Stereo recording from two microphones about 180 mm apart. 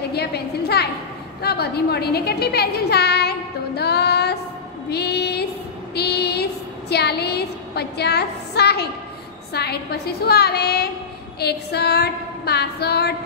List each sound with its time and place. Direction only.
0.1 s a woman's voice: 65° left (ahead or behind)
5.9 s a sound: 65° left (ahead or behind)
9.5 s a woman's voice: 65° left (ahead or behind)